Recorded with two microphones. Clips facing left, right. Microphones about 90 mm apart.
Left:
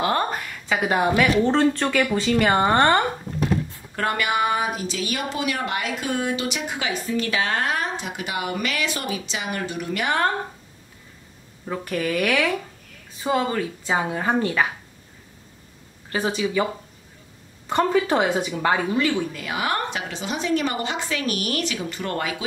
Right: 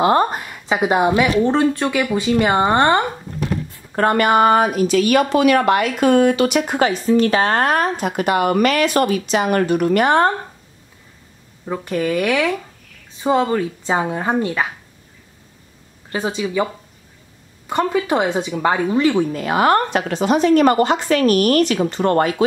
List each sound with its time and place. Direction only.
0.0 s a woman's voice: 25° right (ahead or behind)
3.9 s speech: 45° right (ahead or behind)
7.1 s a woman's voice: 40° right (ahead or behind)
11.8 s speech: 20° right (ahead or behind)
16.1 s speech: 20° right (ahead or behind)
17.6 s speech: 10° right (ahead or behind)
18.9 s a woman's voice: 35° right (ahead or behind)